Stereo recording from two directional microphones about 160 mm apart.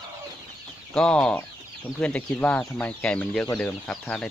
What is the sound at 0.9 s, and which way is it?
Speech, 5° left (ahead or behind).